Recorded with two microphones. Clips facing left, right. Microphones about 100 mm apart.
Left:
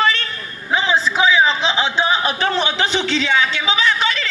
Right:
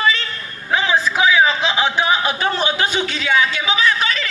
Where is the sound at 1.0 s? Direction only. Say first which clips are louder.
Even; 25° left (ahead or behind).